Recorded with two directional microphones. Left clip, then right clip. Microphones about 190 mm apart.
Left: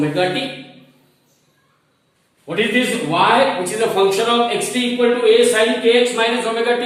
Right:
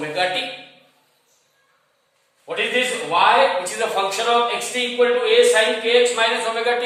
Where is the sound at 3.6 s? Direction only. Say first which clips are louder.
Left 5 dB; 15° right (ahead or behind).